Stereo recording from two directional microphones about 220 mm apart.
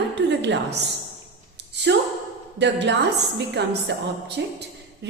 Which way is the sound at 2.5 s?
55° right (ahead or behind).